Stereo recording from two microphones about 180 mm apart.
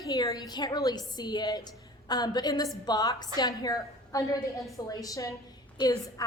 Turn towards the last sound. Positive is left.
turn(degrees=25)  # may be behind; listen again after turning